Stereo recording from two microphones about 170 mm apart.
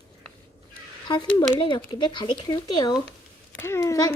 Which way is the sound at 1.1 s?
20° left (ahead or behind).